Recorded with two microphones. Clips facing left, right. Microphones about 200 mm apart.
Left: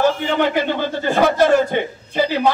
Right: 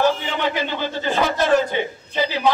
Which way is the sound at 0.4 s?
55° left (ahead or behind).